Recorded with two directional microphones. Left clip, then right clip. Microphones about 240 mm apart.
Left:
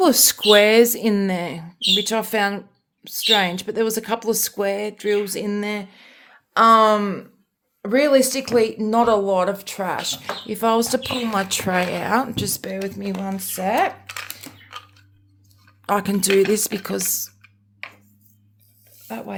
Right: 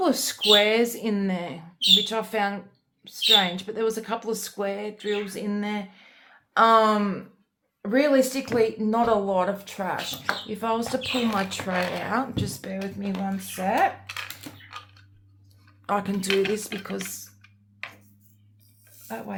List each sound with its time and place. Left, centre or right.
0.0 s speech: left
14.1 s a sound: left
15.9 s speech: left
19.0 s speech: left